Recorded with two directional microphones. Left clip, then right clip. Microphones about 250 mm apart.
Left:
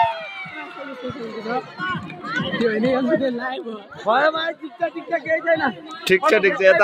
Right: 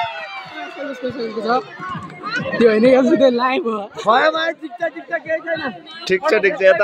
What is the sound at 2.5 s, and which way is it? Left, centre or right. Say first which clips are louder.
A man's voice: right 9 dB; right.